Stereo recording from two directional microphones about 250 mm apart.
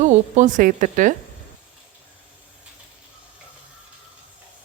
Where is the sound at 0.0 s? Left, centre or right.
Right.